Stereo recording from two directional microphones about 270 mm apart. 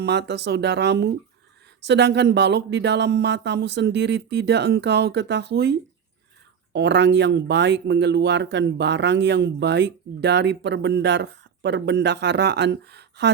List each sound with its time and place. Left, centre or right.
0.0 s speech: right
6.7 s speech: right